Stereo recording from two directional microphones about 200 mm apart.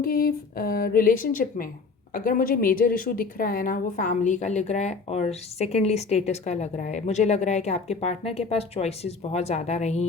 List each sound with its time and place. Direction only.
0.0 s a woman's voice: 45° left (ahead or behind)